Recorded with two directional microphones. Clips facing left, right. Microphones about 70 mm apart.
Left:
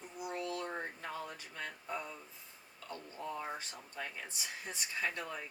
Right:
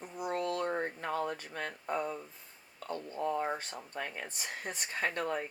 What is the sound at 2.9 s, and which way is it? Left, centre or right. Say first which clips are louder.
Speech: right 8 dB; right.